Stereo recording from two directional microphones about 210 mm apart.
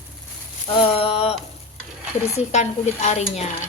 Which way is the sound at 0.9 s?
25° left (ahead or behind).